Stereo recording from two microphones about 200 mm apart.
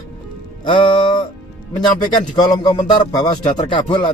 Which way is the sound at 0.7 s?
25° left (ahead or behind).